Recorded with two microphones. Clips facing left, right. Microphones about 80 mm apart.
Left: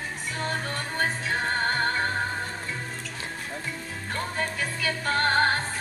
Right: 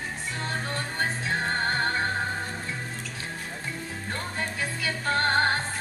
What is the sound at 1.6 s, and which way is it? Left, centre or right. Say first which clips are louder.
Music: left 1 dB; right.